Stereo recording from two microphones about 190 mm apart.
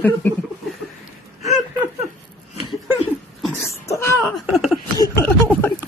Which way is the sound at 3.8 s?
15° left (ahead or behind).